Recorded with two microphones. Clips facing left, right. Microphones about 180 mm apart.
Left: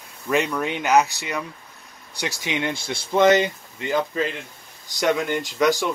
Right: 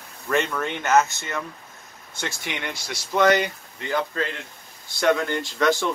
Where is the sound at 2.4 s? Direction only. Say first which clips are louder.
Left 6 dB; 20° left (ahead or behind).